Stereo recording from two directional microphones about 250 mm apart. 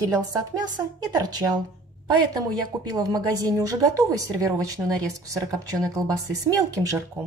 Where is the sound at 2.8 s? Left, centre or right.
Centre.